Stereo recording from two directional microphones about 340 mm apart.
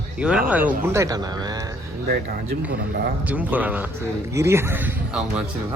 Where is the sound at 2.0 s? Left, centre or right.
Right.